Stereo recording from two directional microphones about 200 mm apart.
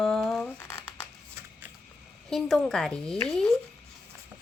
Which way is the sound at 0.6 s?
15° left (ahead or behind).